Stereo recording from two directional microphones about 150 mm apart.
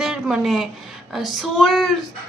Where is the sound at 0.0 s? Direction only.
5° right (ahead or behind).